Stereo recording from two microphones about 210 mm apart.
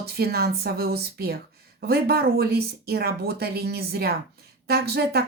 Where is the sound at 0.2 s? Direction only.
50° right (ahead or behind).